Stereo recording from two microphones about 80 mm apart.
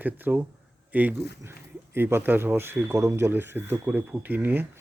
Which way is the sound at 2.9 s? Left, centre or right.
Right.